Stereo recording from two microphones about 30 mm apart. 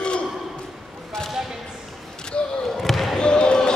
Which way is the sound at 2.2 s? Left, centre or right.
Left.